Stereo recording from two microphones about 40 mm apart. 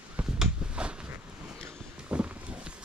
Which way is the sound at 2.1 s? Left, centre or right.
Right.